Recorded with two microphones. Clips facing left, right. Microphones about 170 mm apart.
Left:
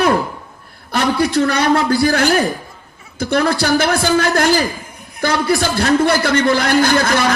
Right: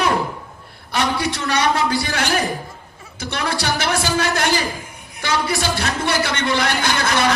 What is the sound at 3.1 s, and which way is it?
A man's voice, 55° left (ahead or behind).